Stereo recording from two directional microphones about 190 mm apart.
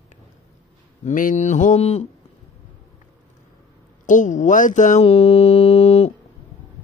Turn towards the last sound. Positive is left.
turn(degrees=30)  # may be behind; listen again after turning